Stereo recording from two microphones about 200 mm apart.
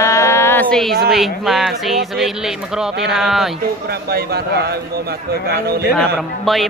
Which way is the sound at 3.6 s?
50° right (ahead or behind).